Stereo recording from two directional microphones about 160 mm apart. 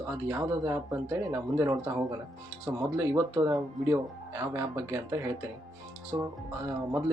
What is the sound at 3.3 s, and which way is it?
Speech, 20° right (ahead or behind).